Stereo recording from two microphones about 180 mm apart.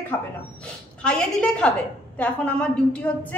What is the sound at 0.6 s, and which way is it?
A woman's voice, 5° left (ahead or behind).